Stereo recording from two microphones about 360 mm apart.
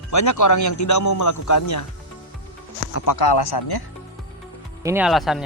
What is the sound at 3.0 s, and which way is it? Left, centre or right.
Speech, left.